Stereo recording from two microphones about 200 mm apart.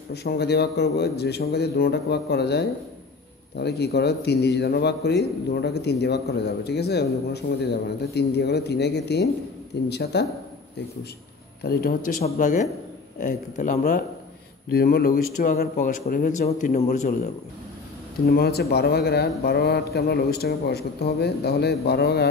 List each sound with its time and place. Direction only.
0.1 s speech: 55° left (ahead or behind)
11.6 s a man's voice: 50° left (ahead or behind)
14.7 s speech: 50° left (ahead or behind)
18.2 s speech: 50° left (ahead or behind)